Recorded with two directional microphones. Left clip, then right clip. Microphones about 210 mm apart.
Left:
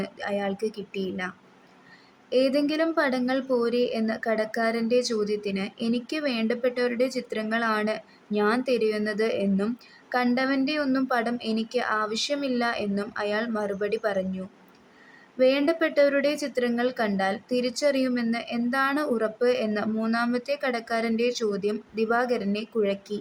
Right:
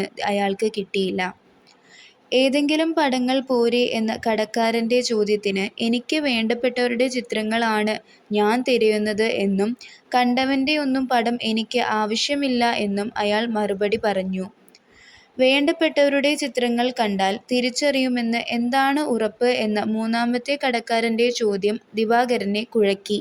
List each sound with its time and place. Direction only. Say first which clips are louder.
0.0 s a woman's voice: right 7 dB; 25° right (ahead or behind)
2.3 s a woman's voice: right 4 dB; 20° right (ahead or behind)